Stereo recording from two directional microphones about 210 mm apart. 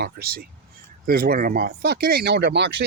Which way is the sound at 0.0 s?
45° right (ahead or behind).